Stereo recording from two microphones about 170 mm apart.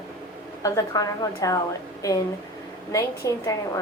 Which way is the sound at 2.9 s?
20° left (ahead or behind).